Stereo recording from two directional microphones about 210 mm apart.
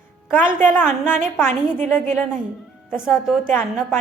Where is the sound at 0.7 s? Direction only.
10° left (ahead or behind).